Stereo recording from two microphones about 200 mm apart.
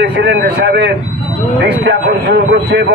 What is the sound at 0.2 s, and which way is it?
A man's voice, 55° right (ahead or behind).